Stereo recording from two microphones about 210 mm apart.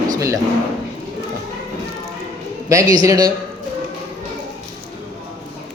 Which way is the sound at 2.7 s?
15° right (ahead or behind).